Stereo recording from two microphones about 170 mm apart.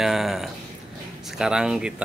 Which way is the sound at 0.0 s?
Centre (ahead or behind).